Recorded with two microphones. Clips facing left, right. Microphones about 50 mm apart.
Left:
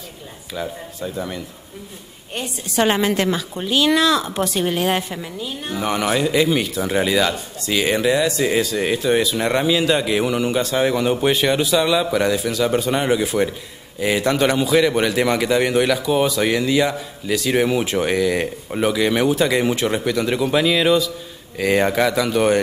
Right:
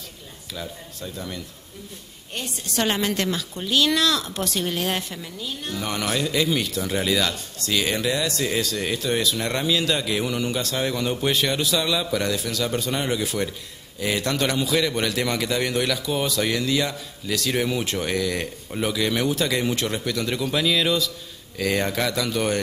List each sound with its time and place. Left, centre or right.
0.6 s a woman's voice: centre